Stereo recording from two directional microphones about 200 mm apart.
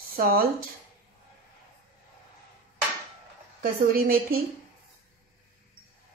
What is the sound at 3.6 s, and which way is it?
Speech, 45° right (ahead or behind).